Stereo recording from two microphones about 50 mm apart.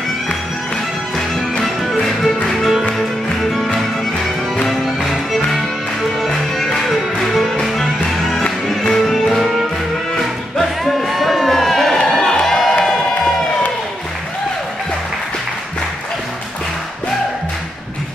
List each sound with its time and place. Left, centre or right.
1.6 s music: centre
10.6 s a sound: centre
12.8 s music: centre